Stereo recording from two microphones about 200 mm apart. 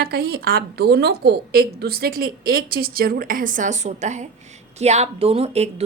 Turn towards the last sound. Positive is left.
turn(degrees=-30)  # may be behind; listen again after turning